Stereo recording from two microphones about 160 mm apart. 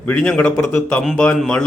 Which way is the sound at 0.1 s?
5° left (ahead or behind).